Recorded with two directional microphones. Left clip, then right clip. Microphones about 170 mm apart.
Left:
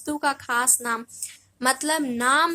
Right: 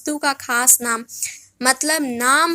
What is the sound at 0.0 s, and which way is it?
A woman's voice, 20° right (ahead or behind).